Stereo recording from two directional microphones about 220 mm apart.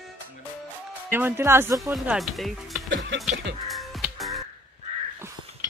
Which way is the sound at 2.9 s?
55° right (ahead or behind).